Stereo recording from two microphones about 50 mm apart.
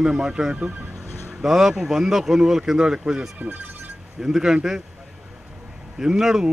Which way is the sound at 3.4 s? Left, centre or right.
Right.